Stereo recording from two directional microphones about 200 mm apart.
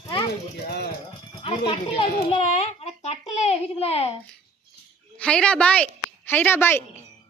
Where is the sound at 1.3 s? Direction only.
25° left (ahead or behind).